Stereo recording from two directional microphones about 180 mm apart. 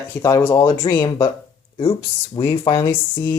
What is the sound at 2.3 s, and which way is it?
Speech, 25° left (ahead or behind).